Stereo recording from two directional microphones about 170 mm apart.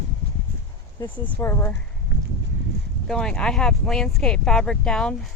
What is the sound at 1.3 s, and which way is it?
Speech, 15° left (ahead or behind).